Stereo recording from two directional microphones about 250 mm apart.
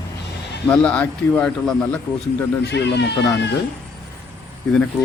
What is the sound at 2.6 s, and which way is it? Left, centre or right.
Speech, left.